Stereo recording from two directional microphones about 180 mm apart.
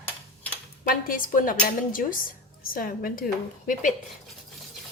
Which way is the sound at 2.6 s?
50° left (ahead or behind).